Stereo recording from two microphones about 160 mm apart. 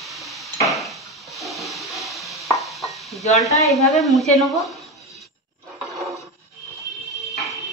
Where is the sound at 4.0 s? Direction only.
Centre (ahead or behind).